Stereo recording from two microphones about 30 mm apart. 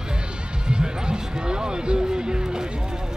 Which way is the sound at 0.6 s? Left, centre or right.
Right.